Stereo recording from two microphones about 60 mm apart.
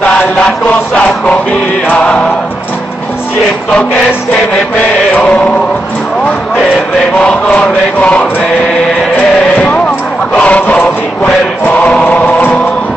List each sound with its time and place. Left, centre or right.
0.0 s chant: left
0.9 s music: left
5.1 s chant: left
7.2 s chant: centre
9.6 s a sound: left
11.6 s choir: left